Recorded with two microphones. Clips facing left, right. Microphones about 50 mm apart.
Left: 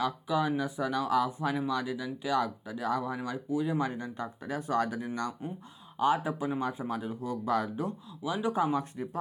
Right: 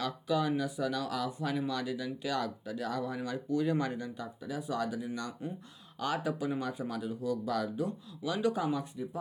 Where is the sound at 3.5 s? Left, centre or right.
Centre.